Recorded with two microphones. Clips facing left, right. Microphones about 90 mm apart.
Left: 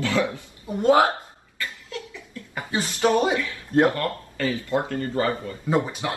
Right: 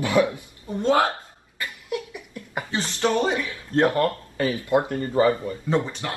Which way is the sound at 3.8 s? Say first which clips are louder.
Right 2 dB; 25° right (ahead or behind).